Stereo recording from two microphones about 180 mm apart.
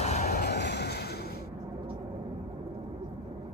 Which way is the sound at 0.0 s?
35° left (ahead or behind).